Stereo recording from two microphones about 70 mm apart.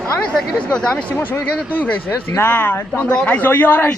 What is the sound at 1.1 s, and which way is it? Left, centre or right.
A man's voice, left.